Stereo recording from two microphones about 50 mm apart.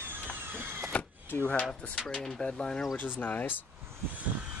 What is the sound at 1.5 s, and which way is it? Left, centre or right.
Speech, left.